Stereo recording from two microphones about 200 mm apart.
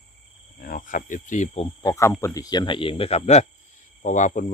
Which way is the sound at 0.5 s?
45° left (ahead or behind).